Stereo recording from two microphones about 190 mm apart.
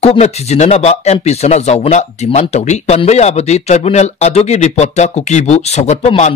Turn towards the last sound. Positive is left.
turn(degrees=35)  # may be behind; listen again after turning